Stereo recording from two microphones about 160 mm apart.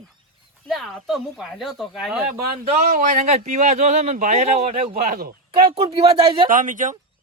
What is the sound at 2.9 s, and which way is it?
Speech, 55° right (ahead or behind).